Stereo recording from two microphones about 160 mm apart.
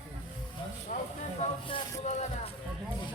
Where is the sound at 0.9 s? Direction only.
55° left (ahead or behind).